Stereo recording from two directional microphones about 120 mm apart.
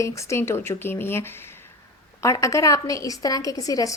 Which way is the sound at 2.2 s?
25° left (ahead or behind).